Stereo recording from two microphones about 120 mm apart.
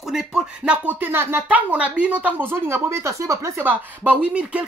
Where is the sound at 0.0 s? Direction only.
5° right (ahead or behind); by 3.7 s 25° right (ahead or behind).